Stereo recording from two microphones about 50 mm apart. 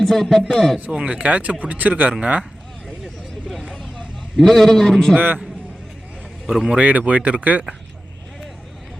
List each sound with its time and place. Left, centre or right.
0.0 s speech: centre
0.8 s speech: right
3.5 s vehicle: centre
3.8 s a man's voice: centre
5.1 s a man's voice: right
6.5 s speech: centre
6.7 s speech: right